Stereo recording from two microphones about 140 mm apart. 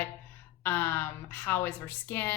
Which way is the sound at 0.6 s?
15° left (ahead or behind).